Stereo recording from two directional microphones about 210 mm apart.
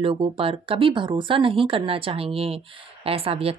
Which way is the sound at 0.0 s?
25° right (ahead or behind).